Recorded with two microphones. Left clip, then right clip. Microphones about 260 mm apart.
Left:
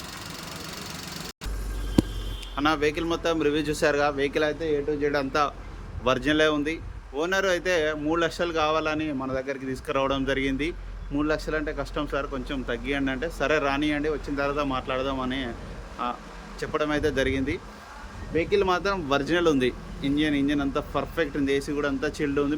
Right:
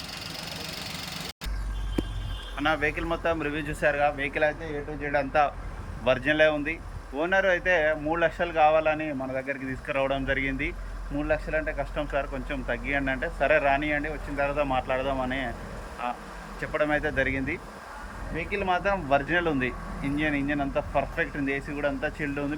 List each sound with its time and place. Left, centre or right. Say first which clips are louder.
2.6 s speech: left 2 dB; centre